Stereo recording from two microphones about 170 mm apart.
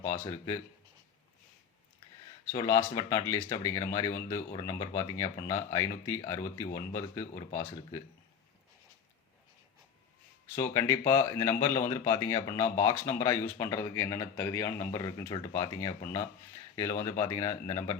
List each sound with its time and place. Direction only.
0.0 s speech: 20° left (ahead or behind)
2.5 s speech: 20° left (ahead or behind)
10.6 s speech: 15° left (ahead or behind)
17.0 s speech: 20° left (ahead or behind)